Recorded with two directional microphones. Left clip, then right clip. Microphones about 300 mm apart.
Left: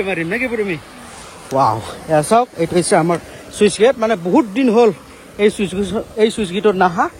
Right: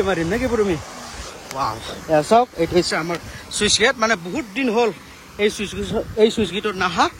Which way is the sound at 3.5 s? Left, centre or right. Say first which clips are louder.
Left 4 dB; centre.